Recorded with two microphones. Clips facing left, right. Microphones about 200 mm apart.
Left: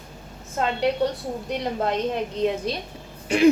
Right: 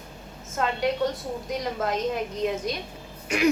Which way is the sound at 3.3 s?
30° left (ahead or behind).